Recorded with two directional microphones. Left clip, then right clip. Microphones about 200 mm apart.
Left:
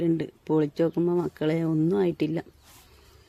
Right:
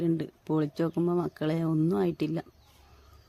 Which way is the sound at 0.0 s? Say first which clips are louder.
Left 4 dB; 5° left (ahead or behind).